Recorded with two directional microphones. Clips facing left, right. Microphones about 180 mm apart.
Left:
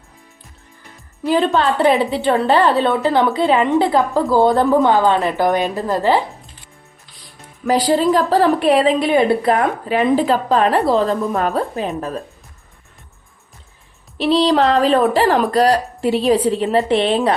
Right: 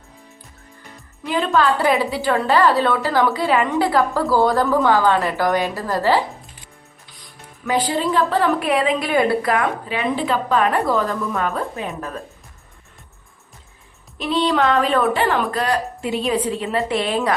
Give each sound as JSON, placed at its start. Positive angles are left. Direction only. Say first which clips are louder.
{"t": 1.2, "sound": "a woman's voice", "louder": "left 3 dB", "side_deg": 30}
{"t": 7.6, "sound": "speech", "louder": "left 5 dB", "side_deg": 35}
{"t": 14.2, "sound": "speech", "louder": "left 5 dB", "side_deg": 35}